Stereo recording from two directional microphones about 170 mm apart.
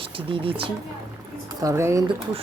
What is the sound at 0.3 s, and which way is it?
Speech, 30° right (ahead or behind).